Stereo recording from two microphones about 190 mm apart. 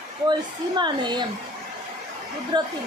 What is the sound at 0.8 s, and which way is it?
Speech, 25° right (ahead or behind).